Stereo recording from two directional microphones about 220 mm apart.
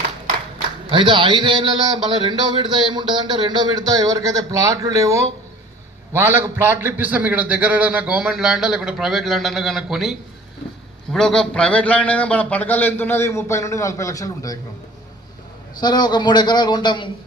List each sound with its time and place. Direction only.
0.9 s a man's voice: 20° right (ahead or behind); by 14.6 s 15° left (ahead or behind)
15.8 s a man's voice: 20° left (ahead or behind)